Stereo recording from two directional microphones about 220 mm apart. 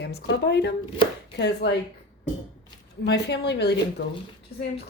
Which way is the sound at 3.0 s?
50° left (ahead or behind).